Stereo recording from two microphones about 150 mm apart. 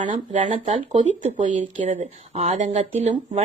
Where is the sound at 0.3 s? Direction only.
55° right (ahead or behind).